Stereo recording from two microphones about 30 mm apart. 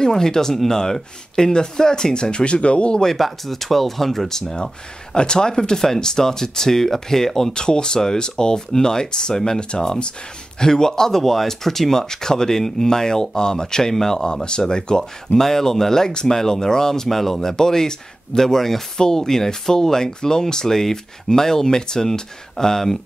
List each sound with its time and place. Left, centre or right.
0.0 s speech: centre; by 3.0 s left
3.2 s speech: centre
4.3 s speech: centre
5.1 s speech: left; by 7.5 s centre
7.5 s speech: left
9.6 s speech: left
10.6 s speech: centre
15.3 s speech: centre